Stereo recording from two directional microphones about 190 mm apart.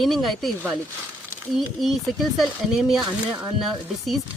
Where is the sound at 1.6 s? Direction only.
Centre (ahead or behind).